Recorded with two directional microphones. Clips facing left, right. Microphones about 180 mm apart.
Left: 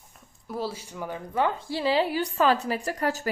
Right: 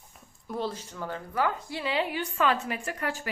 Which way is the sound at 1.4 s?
30° left (ahead or behind).